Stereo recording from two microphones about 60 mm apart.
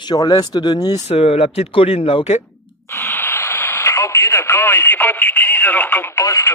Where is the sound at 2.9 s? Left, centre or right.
Left.